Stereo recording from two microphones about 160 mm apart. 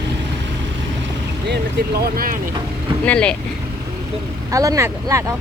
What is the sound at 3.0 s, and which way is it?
Speech, 5° left (ahead or behind).